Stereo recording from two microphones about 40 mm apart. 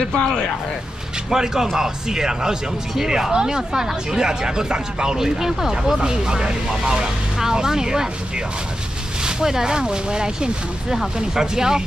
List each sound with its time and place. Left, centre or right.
0.1 s speech: centre
1.3 s speech: centre
9.2 s speech: centre